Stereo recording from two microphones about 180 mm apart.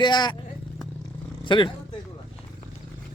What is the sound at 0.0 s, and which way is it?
Speech, 25° left (ahead or behind).